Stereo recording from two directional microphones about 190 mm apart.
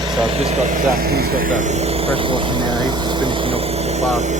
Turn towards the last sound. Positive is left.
turn(degrees=-35)  # may be behind; listen again after turning